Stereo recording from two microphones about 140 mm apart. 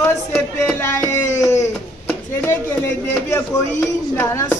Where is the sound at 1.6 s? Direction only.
20° left (ahead or behind).